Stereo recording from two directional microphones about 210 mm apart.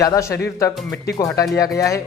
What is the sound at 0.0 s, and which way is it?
Speech, 15° left (ahead or behind).